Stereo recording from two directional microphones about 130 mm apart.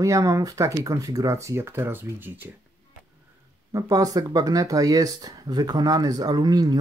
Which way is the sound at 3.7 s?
25° right (ahead or behind).